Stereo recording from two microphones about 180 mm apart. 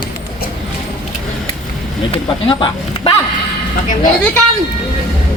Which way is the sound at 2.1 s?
30° left (ahead or behind).